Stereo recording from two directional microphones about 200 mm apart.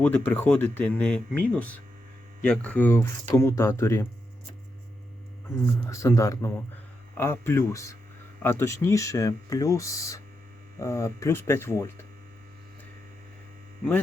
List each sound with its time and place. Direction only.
0.0 s speech: 10° left (ahead or behind)
5.9 s speech: 15° left (ahead or behind)